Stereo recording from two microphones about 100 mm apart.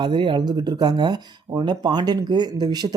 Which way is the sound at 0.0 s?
50° right (ahead or behind).